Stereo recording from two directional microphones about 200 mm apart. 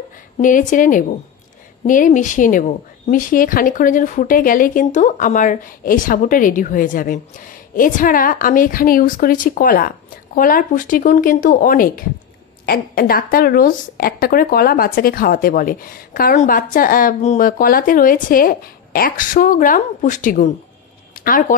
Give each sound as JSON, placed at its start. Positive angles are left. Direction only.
{"t": 0.4, "sound": "a woman's voice", "side_deg": 40}